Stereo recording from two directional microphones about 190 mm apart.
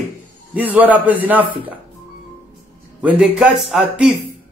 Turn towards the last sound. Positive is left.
turn(degrees=0)  # may be behind; listen again after turning